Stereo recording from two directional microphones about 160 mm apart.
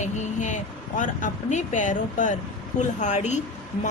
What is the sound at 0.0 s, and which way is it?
A woman's voice, 50° left (ahead or behind).